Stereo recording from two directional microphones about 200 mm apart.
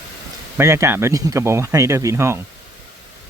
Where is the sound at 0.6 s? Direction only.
15° right (ahead or behind).